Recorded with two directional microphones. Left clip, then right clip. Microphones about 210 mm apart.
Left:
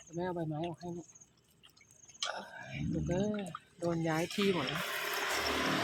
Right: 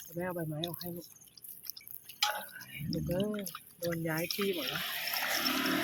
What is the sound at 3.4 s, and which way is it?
Speech, centre (ahead or behind).